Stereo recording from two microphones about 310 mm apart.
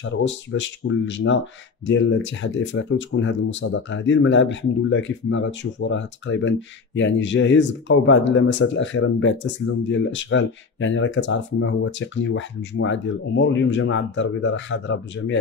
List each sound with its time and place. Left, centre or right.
0.0 s speech: left